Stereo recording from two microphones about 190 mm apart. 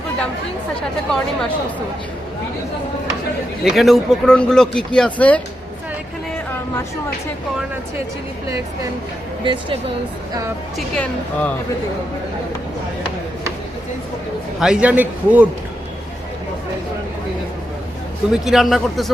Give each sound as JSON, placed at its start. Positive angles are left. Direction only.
{"t": 0.8, "sound": "speech", "side_deg": 5}
{"t": 3.6, "sound": "speech", "side_deg": 0}
{"t": 9.4, "sound": "speech", "side_deg": -25}
{"t": 10.8, "sound": "speech", "side_deg": 5}
{"t": 14.6, "sound": "a man's voice", "side_deg": -5}
{"t": 18.4, "sound": "speech", "side_deg": 0}